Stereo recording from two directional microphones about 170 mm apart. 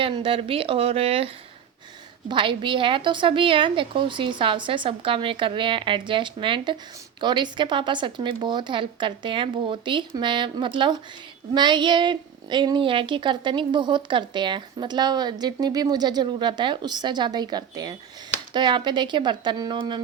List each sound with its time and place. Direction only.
0.0 s speech: 30° right (ahead or behind)
2.3 s a woman's voice: 30° right (ahead or behind)